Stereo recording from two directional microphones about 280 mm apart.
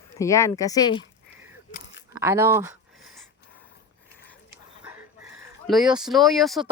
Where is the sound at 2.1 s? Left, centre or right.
Centre.